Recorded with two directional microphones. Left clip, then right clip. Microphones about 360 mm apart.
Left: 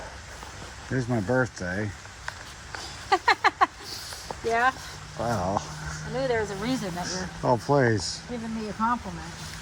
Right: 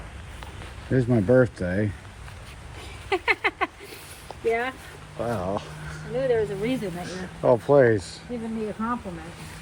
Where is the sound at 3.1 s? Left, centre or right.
Centre.